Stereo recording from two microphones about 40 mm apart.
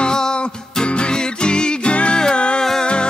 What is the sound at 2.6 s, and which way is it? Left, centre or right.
Music, centre.